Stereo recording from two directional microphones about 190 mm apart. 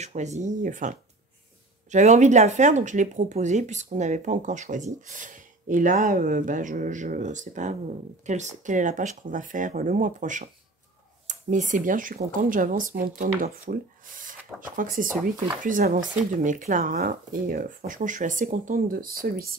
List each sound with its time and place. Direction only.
0.0 s speech: 35° right (ahead or behind)